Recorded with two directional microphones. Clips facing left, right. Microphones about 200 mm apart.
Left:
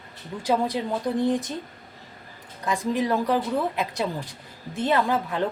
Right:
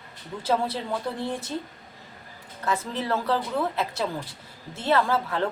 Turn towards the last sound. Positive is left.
turn(degrees=15)  # may be behind; listen again after turning